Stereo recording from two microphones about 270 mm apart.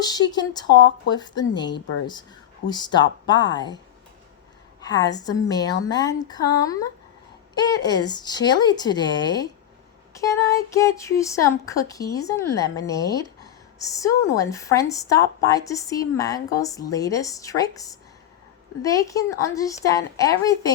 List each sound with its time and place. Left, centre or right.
0.0 s speech: centre
4.8 s speech: centre